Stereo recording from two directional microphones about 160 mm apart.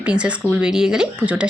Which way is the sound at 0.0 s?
5° right (ahead or behind).